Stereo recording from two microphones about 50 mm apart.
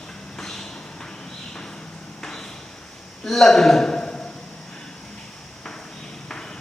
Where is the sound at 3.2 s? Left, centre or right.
Centre.